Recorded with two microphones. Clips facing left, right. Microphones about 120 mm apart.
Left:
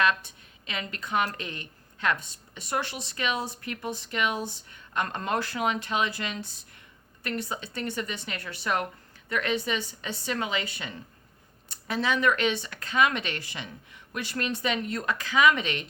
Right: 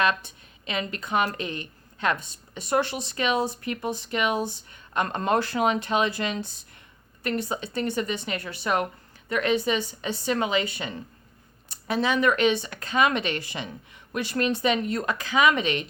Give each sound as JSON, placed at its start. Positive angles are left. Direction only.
{"t": 0.0, "sound": "speech", "side_deg": -25}